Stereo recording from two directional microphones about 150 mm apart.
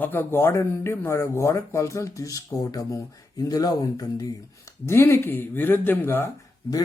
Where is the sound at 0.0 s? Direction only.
15° left (ahead or behind).